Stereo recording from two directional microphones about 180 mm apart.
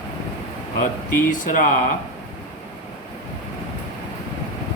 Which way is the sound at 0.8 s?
45° left (ahead or behind).